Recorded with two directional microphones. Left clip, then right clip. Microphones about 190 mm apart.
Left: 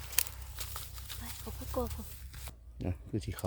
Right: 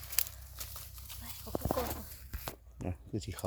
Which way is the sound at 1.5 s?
40° left (ahead or behind).